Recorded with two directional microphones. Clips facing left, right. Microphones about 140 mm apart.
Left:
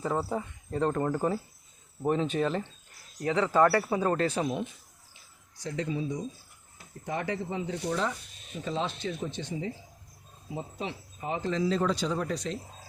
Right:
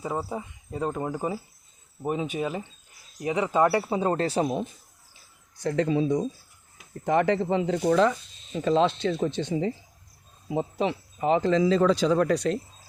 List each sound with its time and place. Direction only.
0.0 s speech: 10° right (ahead or behind); by 4.7 s 35° right (ahead or behind)
5.5 s speech: 65° right (ahead or behind); by 8.1 s 90° right
8.5 s speech: 80° right